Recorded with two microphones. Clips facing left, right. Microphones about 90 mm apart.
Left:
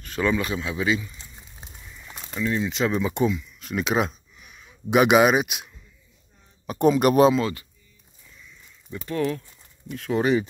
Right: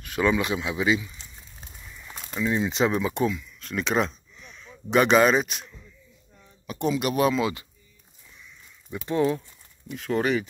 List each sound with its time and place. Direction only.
0.0 s speech: 10° right (ahead or behind)
1.2 s crumpling: 10° left (ahead or behind)
2.4 s speech: 20° right (ahead or behind)
2.9 s speech: centre (ahead or behind)
6.7 s speech: 45° left (ahead or behind)
8.9 s speech: 20° right (ahead or behind)
9.8 s speech: centre (ahead or behind)